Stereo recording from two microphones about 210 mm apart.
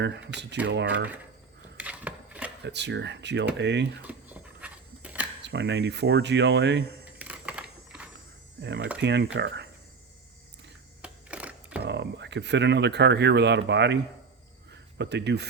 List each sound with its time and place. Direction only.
0.3 s speech: 55° right (ahead or behind)
1.8 s a sound: 5° right (ahead or behind)
2.6 s speech: 55° right (ahead or behind)
4.0 s a sound: 5° right (ahead or behind)
5.4 s speech: 55° right (ahead or behind)
7.0 s typing: 5° right (ahead or behind)
8.6 s speech: 55° right (ahead or behind)
11.0 s sewing machine: 5° right (ahead or behind)
11.8 s speech: 55° right (ahead or behind)
14.7 s a sound: 55° right (ahead or behind)